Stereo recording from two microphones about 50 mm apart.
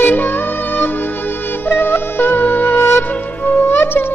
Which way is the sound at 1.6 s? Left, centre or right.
Left.